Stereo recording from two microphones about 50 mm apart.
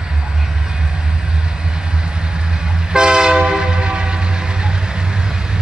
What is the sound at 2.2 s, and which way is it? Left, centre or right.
Train, centre.